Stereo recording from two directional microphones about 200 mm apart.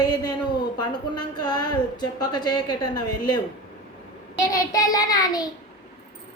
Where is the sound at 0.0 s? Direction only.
20° left (ahead or behind).